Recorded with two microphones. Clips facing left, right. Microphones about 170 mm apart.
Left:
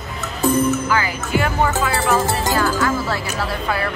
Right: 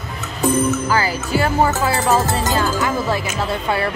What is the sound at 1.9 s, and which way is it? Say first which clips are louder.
Music: right 1 dB; 20° right (ahead or behind).